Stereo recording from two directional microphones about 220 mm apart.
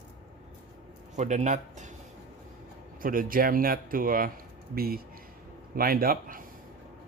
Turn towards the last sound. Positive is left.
turn(degrees=-40)  # may be behind; listen again after turning